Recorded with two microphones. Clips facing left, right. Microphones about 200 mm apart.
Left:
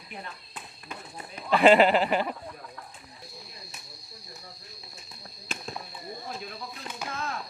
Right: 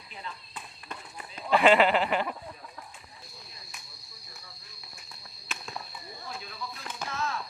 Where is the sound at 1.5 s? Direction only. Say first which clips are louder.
Left 3 dB; 40° left (ahead or behind).